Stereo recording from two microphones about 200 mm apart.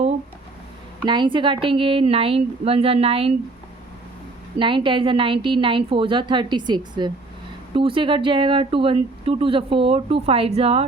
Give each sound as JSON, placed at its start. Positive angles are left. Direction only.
{"t": 1.0, "sound": "speech", "side_deg": -25}
{"t": 4.5, "sound": "speech", "side_deg": -25}